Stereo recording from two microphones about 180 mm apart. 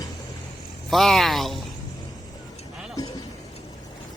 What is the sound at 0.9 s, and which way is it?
Speech, centre (ahead or behind).